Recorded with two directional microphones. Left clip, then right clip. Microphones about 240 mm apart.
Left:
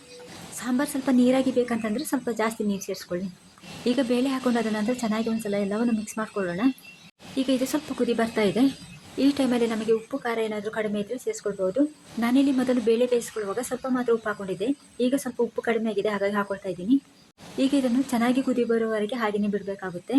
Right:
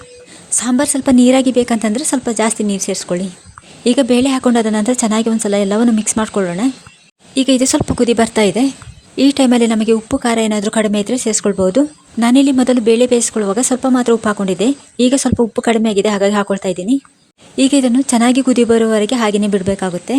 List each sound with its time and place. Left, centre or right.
0.5 s speech: right
9.1 s speech: right
20.1 s speech: right